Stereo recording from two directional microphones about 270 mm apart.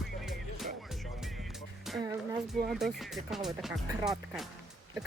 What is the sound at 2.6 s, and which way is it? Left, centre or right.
Speech, centre.